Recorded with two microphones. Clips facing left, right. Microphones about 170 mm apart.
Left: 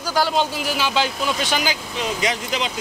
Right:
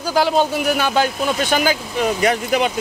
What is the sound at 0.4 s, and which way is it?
Speech, 55° right (ahead or behind).